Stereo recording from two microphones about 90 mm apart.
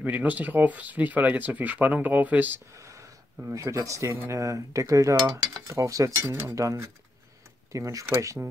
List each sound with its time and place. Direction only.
0.0 s speech: 20° right (ahead or behind)
2.7 s a sound: 35° right (ahead or behind)
3.5 s cutlery: 40° right (ahead or behind)
6.2 s speech: 20° right (ahead or behind)
6.5 s cutlery: 40° right (ahead or behind)